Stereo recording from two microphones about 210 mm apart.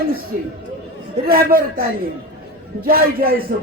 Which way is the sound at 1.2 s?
45° right (ahead or behind).